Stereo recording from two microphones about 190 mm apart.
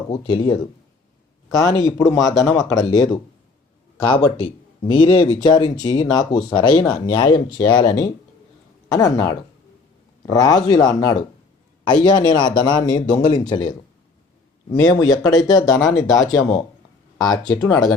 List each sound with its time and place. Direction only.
0.1 s a man's voice: 25° left (ahead or behind)
1.5 s a man's voice: 15° left (ahead or behind)
14.8 s a man's voice: 20° left (ahead or behind)